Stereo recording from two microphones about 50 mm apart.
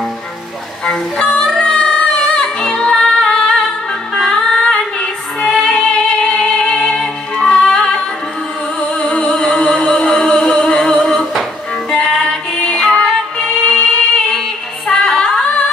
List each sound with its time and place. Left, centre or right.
0.8 s music: centre
14.9 s female singing: centre